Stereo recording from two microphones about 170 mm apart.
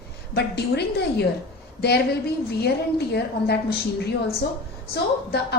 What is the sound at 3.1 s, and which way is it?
Speech, 70° left (ahead or behind).